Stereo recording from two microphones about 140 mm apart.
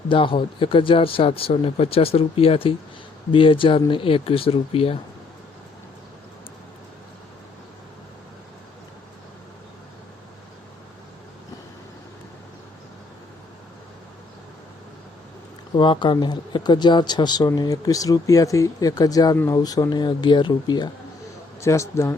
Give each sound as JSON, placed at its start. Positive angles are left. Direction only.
{"t": 0.1, "sound": "speech", "side_deg": 35}
{"t": 15.7, "sound": "speech", "side_deg": 35}
{"t": 21.6, "sound": "speech", "side_deg": 20}